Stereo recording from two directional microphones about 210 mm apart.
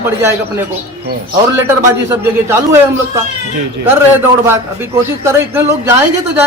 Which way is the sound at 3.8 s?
10° right (ahead or behind).